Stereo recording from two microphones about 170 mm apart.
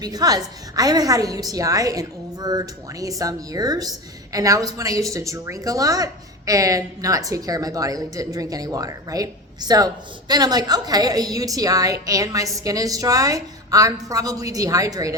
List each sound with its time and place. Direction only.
0.0 s a woman's voice: 25° right (ahead or behind)